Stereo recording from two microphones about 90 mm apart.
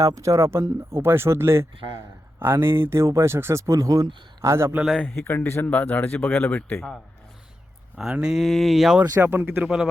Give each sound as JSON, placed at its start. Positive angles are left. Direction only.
{"t": 0.0, "sound": "a man's voice", "side_deg": -35}
{"t": 5.1, "sound": "speech", "side_deg": 25}
{"t": 8.1, "sound": "speech", "side_deg": -5}
{"t": 9.0, "sound": "speech", "side_deg": -25}
{"t": 9.6, "sound": "a man's voice", "side_deg": -10}